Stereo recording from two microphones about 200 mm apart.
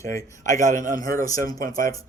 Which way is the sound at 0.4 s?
40° right (ahead or behind).